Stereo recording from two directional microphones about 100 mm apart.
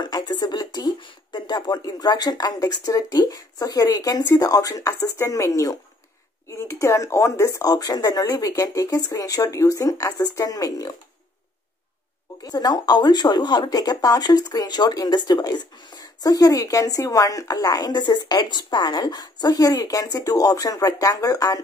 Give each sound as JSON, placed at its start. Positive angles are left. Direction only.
{"t": 0.0, "sound": "speech", "side_deg": 45}
{"t": 12.4, "sound": "speech", "side_deg": 40}